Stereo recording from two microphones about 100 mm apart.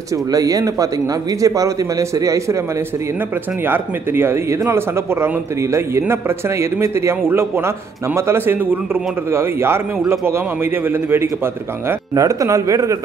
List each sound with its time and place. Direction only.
0.3 s a man's voice: 35° right (ahead or behind)
3.6 s speech: 20° right (ahead or behind)
12.2 s a man's voice: 35° right (ahead or behind)